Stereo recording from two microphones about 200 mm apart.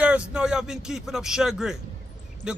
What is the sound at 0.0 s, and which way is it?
Speech, 5° right (ahead or behind).